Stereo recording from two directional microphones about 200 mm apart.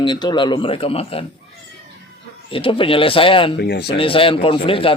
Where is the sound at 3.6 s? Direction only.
55° left (ahead or behind).